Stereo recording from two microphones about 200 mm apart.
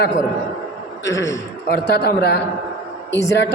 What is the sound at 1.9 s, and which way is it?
Speech, 55° left (ahead or behind).